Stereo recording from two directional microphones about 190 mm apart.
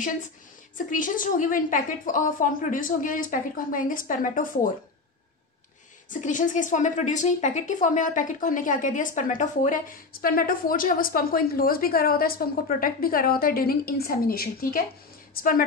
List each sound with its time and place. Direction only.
0.8 s a woman's voice: 45° left (ahead or behind)
6.0 s a woman's voice: 45° left (ahead or behind)